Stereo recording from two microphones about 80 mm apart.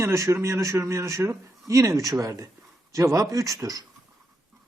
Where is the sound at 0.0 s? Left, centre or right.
Right.